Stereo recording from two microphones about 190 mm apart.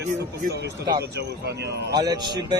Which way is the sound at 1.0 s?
60° right (ahead or behind).